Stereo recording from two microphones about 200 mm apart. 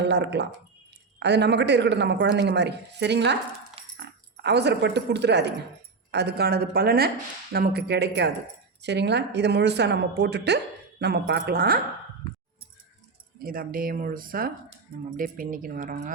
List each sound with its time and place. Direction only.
0.0 s speech: 60° right (ahead or behind)
13.4 s speech: 45° right (ahead or behind)